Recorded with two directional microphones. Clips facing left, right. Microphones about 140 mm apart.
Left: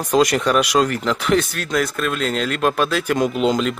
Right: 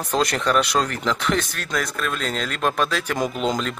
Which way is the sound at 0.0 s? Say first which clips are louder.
Left 5 dB; 10° left (ahead or behind).